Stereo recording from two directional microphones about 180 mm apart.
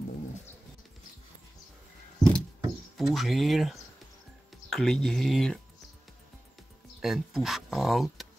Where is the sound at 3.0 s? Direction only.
Centre (ahead or behind).